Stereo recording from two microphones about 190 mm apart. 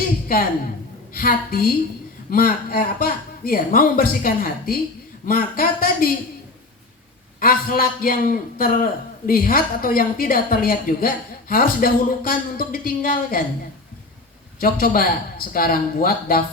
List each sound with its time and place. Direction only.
1.1 s a man's voice: 50° left (ahead or behind)
7.3 s a man's voice: 50° left (ahead or behind)
14.6 s a man's voice: 50° left (ahead or behind)